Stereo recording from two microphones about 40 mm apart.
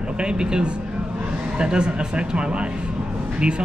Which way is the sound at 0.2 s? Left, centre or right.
Right.